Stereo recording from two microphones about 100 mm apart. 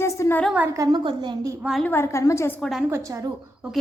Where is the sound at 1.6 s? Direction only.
5° right (ahead or behind).